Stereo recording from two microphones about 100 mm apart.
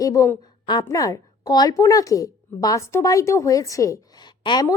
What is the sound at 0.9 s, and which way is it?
A woman's voice, 35° left (ahead or behind).